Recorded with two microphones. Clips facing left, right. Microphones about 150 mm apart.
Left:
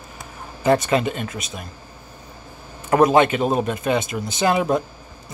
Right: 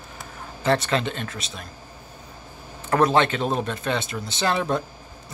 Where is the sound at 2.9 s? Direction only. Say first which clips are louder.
Left 4 dB; 10° left (ahead or behind).